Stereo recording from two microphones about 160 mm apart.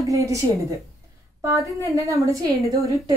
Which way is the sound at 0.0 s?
20° right (ahead or behind).